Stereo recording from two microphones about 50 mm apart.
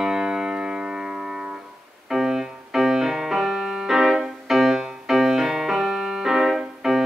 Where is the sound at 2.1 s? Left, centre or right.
Centre.